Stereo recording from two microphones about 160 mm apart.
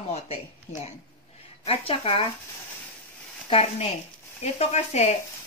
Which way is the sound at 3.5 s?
40° left (ahead or behind).